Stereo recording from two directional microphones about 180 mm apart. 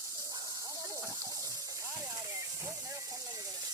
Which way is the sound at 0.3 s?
20° right (ahead or behind).